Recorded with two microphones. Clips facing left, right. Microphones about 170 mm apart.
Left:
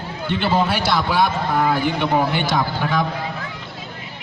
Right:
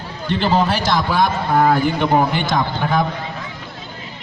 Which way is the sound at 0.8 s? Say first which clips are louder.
Right 1 dB; 45° right (ahead or behind).